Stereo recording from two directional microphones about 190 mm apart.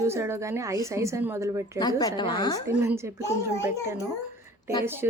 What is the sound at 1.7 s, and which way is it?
Speech, 20° left (ahead or behind).